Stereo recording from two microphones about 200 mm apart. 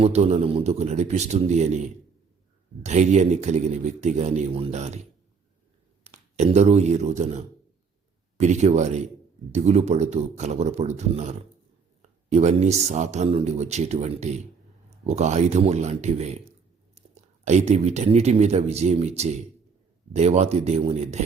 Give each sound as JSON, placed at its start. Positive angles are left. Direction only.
{"t": 0.0, "sound": "speech", "side_deg": -30}
{"t": 6.3, "sound": "speech", "side_deg": -35}